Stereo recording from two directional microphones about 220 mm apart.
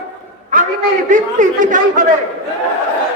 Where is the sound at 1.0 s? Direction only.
35° right (ahead or behind).